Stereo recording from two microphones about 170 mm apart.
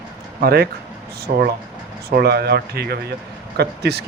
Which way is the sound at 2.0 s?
70° right (ahead or behind).